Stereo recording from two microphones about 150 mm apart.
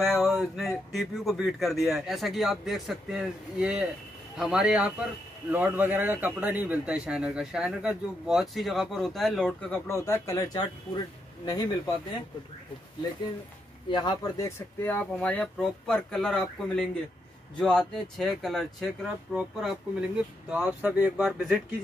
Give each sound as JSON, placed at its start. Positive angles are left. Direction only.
{"t": 0.1, "sound": "a man's voice", "side_deg": 0}
{"t": 9.8, "sound": "speech", "side_deg": 20}
{"t": 13.8, "sound": "speech", "side_deg": 30}
{"t": 14.8, "sound": "a man's voice", "side_deg": 10}